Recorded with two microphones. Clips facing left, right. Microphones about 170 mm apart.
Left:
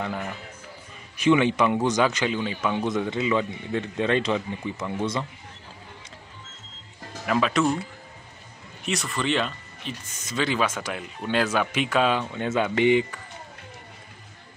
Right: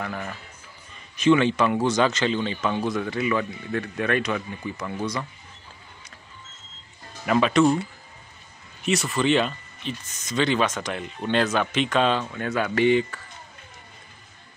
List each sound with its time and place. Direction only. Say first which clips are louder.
0.0 s speech: left 1 dB; 15° left (ahead or behind)
7.2 s speech: right 3 dB; centre (ahead or behind)
8.8 s speech: right 5 dB; 5° right (ahead or behind)
12.3 s speech: left 1 dB; 20° left (ahead or behind)